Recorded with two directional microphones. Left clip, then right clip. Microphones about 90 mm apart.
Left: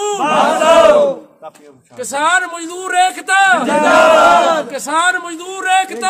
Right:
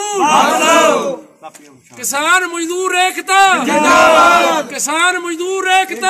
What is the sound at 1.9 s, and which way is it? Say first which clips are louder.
A man's voice: right 1 dB; 35° left (ahead or behind).